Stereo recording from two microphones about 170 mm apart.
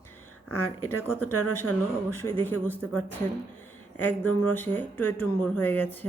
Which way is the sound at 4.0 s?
10° left (ahead or behind).